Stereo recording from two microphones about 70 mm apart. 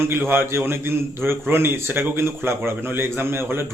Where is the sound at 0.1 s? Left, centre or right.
Right.